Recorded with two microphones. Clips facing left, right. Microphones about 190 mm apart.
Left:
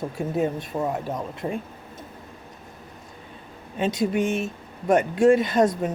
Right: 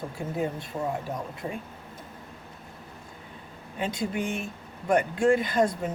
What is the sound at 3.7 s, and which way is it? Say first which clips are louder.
A woman's voice: left 7 dB; 20° left (ahead or behind).